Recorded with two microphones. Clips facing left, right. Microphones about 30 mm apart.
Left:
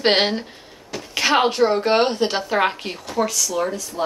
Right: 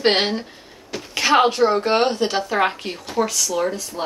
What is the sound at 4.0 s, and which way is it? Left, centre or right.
Speech, right.